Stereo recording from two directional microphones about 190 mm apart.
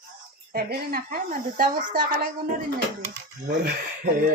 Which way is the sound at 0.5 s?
50° right (ahead or behind).